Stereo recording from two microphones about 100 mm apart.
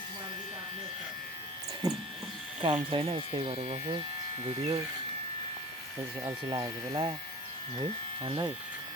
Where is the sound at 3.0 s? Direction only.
55° right (ahead or behind); by 3.7 s 90° right.